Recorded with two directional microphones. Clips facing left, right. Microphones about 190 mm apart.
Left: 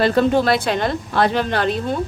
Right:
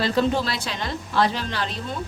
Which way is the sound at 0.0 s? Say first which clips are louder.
Left 6 dB; 55° left (ahead or behind).